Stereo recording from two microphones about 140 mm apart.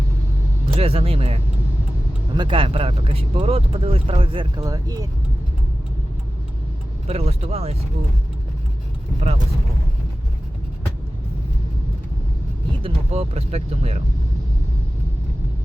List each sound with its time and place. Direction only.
0.7 s speech: 45° right (ahead or behind)
4.6 s speech: 25° right (ahead or behind)
7.1 s speech: 45° right (ahead or behind)
12.8 s speech: 50° right (ahead or behind)